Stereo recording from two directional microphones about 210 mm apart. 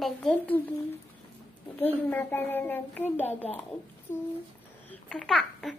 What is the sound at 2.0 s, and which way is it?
A woman's voice, 10° left (ahead or behind).